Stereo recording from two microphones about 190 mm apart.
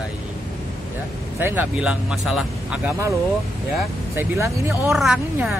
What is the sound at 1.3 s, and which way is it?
Speech, 10° right (ahead or behind).